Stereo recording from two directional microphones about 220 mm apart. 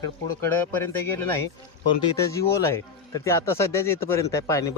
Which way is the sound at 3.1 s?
15° left (ahead or behind).